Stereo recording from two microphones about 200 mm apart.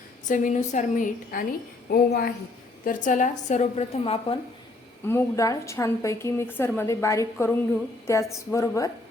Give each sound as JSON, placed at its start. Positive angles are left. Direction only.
{"t": 0.3, "sound": "a woman's voice", "side_deg": 40}
{"t": 5.0, "sound": "a woman's voice", "side_deg": 15}